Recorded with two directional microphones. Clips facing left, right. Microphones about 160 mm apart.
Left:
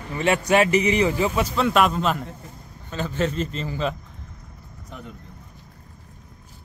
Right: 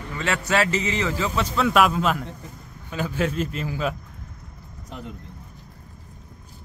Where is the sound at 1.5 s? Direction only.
Centre (ahead or behind).